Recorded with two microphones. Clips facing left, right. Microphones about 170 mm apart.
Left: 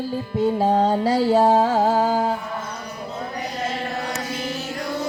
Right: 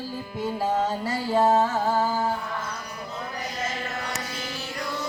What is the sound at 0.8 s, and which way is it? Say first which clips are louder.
Music: left 9 dB; 75° left (ahead or behind).